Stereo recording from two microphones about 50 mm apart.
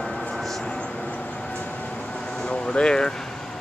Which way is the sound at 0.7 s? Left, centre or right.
Centre.